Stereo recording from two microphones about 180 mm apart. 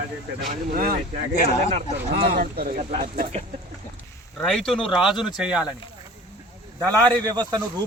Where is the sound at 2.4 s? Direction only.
55° right (ahead or behind).